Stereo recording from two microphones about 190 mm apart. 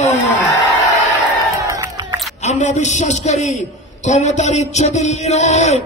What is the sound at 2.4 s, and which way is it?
A man's voice, 40° left (ahead or behind).